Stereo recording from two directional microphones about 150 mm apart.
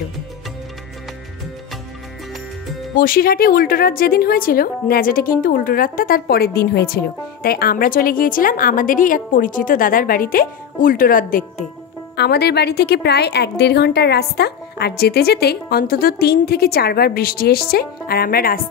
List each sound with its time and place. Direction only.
3.0 s a woman's voice: 80° left; by 11.6 s 65° left (ahead or behind)
12.2 s a woman's voice: 90° left